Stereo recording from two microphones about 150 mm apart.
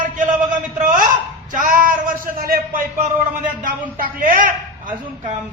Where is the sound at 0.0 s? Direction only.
60° right (ahead or behind).